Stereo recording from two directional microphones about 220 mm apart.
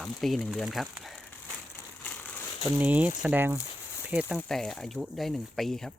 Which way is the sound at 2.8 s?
5° right (ahead or behind).